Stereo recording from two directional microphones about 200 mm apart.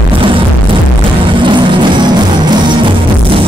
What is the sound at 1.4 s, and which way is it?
Music, 25° right (ahead or behind).